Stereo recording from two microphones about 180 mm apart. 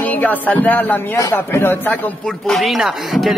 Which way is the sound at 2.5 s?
Centre (ahead or behind).